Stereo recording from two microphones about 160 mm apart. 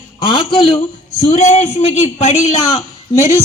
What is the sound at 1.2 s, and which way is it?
A man's voice, 45° left (ahead or behind).